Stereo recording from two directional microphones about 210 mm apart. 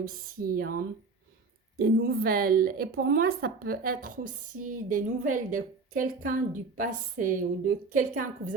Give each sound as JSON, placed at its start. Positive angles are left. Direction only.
{"t": 0.0, "sound": "a woman's voice", "side_deg": -40}